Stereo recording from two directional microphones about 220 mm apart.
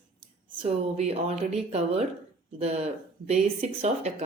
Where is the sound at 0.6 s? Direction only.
30° right (ahead or behind).